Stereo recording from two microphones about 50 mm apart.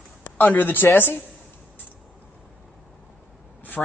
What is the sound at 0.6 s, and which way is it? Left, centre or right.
Speech, left.